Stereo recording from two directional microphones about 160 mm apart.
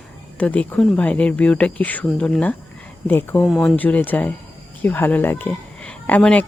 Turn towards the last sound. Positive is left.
turn(degrees=10)  # may be behind; listen again after turning